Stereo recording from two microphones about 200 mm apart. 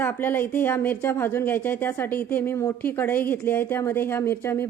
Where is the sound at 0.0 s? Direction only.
10° left (ahead or behind).